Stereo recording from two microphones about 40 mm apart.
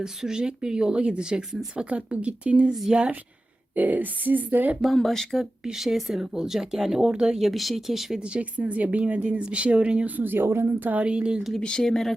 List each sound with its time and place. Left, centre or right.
0.0 s speech: centre
1.7 s speech: right
3.8 s speech: right
4.9 s speech: centre
5.7 s speech: centre
7.1 s speech: right
7.3 s speech: centre
8.1 s speech: right
10.2 s speech: right
10.7 s speech: right
11.0 s speech: right
11.8 s speech: centre